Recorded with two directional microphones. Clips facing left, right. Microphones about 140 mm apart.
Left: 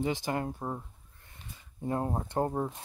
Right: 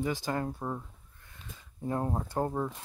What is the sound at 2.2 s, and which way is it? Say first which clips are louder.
Speech: left 1 dB; 20° left (ahead or behind).